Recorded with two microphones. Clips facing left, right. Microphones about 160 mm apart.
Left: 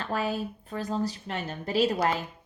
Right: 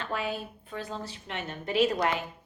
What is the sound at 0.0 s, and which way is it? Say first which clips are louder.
A woman's voice: left 3 dB; 40° left (ahead or behind).